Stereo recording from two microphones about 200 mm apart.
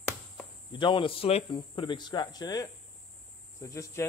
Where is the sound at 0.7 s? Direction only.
25° left (ahead or behind).